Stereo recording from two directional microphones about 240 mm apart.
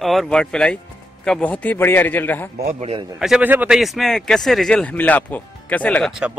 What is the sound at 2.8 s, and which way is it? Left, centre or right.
Speech, right.